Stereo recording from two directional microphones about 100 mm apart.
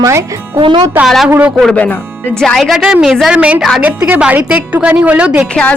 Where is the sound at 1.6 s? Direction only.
10° left (ahead or behind).